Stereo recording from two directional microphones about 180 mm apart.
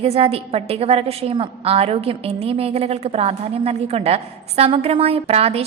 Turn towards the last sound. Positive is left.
turn(degrees=-35)  # may be behind; listen again after turning